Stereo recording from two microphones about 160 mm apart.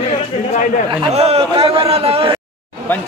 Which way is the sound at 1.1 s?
40° right (ahead or behind).